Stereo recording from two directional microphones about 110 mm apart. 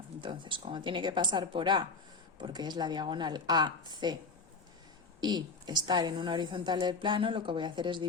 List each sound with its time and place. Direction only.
0.2 s a woman's voice: 50° right (ahead or behind)
5.2 s a woman's voice: 40° right (ahead or behind)